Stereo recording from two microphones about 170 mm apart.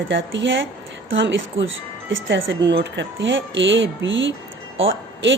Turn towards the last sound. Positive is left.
turn(degrees=-90)